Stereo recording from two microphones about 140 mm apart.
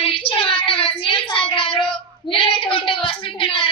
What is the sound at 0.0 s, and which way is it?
Child singing, 40° left (ahead or behind).